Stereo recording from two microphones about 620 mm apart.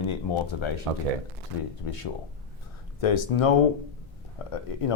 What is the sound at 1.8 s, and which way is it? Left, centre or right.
Speech, left.